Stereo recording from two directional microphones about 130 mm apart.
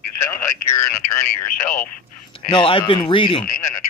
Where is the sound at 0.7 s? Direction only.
20° left (ahead or behind).